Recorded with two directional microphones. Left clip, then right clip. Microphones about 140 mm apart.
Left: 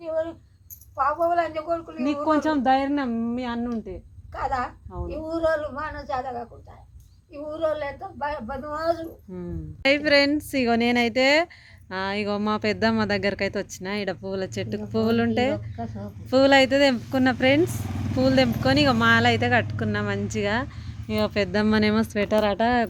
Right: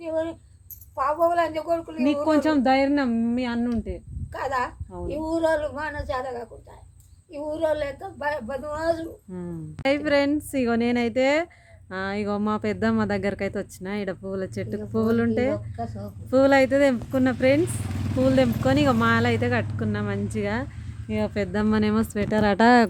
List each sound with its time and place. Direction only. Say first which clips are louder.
0.0 s a sound: even; 25° right (ahead or behind)
0.9 s a woman's voice: even; 30° right (ahead or behind)
8.8 s speech: left 1 dB; 5° right (ahead or behind)
22.4 s speech: right 5 dB; 50° right (ahead or behind)